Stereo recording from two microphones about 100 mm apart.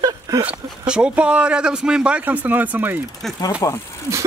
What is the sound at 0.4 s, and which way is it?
Speech, 10° right (ahead or behind).